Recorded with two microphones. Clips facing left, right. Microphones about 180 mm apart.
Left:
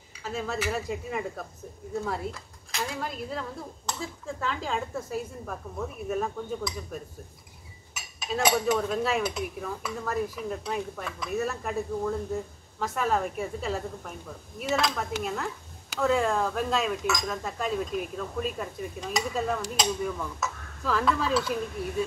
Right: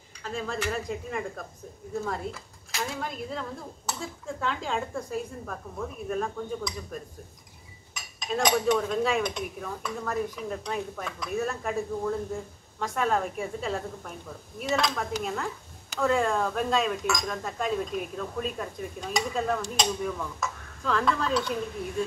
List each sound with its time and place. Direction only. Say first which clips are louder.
0.2 s speech: left 1 dB; 5° left (ahead or behind)